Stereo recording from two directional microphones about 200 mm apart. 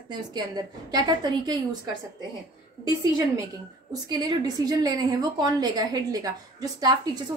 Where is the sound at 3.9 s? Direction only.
20° right (ahead or behind).